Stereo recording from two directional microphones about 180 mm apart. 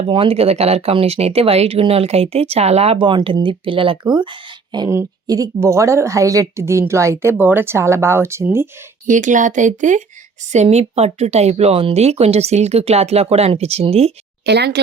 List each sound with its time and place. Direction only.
0.1 s speech: 30° right (ahead or behind); by 8.6 s 15° right (ahead or behind)
9.0 s speech: 45° right (ahead or behind)
14.4 s speech: 70° right (ahead or behind)